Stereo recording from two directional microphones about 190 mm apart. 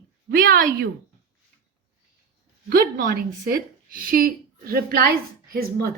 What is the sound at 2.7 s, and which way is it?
A woman's voice, 50° right (ahead or behind).